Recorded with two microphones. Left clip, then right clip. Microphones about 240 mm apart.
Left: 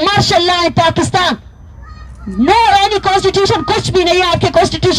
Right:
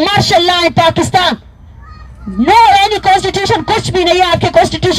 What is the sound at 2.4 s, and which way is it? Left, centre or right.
Speech, right.